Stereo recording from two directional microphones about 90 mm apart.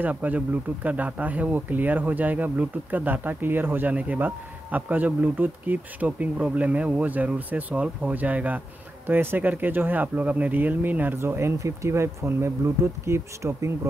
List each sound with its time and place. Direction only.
0.0 s speech: 20° right (ahead or behind)